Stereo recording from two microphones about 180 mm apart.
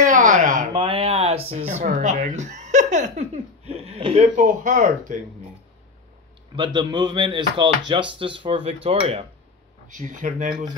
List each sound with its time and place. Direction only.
0.0 s a sound: 45° right (ahead or behind)
0.8 s speech: 35° right (ahead or behind)
6.5 s speech: 25° right (ahead or behind)
9.8 s speech: 45° right (ahead or behind)